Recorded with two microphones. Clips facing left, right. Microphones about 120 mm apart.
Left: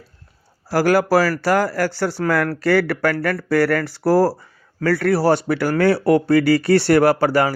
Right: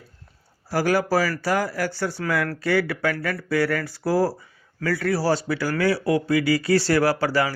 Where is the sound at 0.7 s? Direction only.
85° left.